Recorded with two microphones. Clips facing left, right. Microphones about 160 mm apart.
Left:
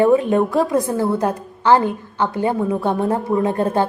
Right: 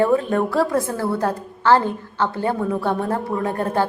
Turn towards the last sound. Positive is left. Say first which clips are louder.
# left 3 dB
turn(degrees=20)  # may be behind; listen again after turning